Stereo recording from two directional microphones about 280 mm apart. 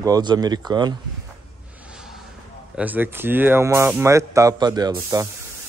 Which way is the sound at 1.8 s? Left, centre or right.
Centre.